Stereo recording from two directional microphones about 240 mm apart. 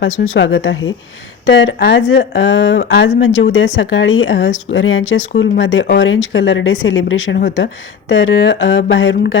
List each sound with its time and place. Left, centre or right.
0.3 s a woman's voice: left